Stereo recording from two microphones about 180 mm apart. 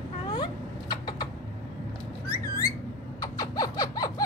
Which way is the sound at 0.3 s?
25° left (ahead or behind).